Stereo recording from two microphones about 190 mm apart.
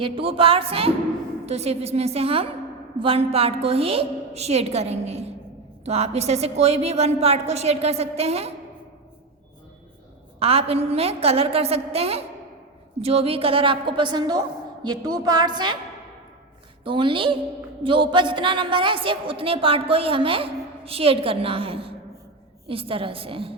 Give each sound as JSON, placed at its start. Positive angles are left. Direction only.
{"t": 0.0, "sound": "a woman's voice", "side_deg": -30}
{"t": 10.4, "sound": "a woman's voice", "side_deg": -30}
{"t": 16.8, "sound": "a woman's voice", "side_deg": -25}